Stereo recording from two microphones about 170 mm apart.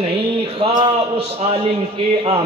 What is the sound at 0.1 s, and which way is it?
A man's voice, 30° right (ahead or behind).